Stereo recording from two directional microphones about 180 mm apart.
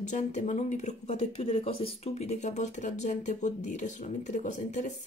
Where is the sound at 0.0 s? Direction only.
40° left (ahead or behind).